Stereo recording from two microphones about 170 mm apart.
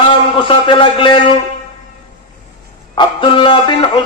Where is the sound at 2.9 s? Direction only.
30° left (ahead or behind).